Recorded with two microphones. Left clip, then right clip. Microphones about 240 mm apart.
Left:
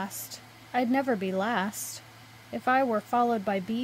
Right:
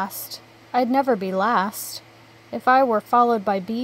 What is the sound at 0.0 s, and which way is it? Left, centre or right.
Speech, centre.